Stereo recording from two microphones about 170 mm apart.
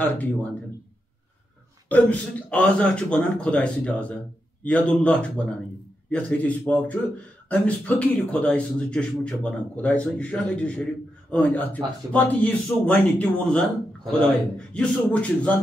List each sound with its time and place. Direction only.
0.0 s speech: 10° left (ahead or behind)
1.9 s speech: 10° left (ahead or behind)